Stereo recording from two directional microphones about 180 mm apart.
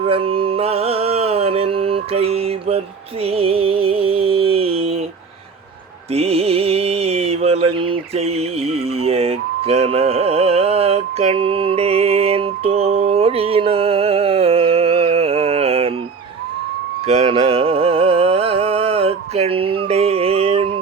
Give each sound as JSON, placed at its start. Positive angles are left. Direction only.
{"t": 0.0, "sound": "music", "side_deg": -30}
{"t": 6.1, "sound": "a sound", "side_deg": -35}
{"t": 17.1, "sound": "music", "side_deg": -35}